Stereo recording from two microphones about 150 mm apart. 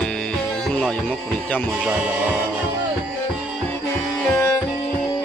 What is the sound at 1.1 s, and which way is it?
Speech, 10° left (ahead or behind).